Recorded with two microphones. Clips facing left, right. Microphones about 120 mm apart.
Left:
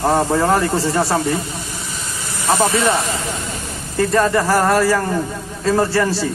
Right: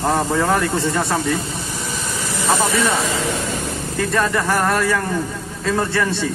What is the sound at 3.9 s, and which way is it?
A man's voice, 35° left (ahead or behind).